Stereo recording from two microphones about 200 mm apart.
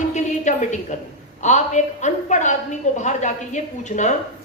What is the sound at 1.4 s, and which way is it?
A woman's voice, 35° left (ahead or behind).